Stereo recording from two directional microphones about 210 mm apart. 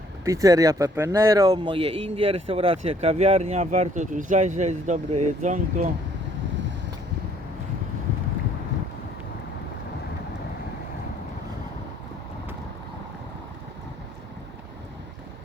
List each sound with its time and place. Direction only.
0.3 s speech: 15° right (ahead or behind); by 5.9 s 35° right (ahead or behind)